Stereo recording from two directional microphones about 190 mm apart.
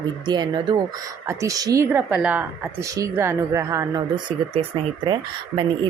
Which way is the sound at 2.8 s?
15° right (ahead or behind).